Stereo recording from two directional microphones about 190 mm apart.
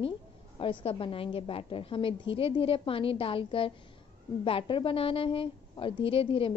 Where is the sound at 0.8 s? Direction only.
30° left (ahead or behind).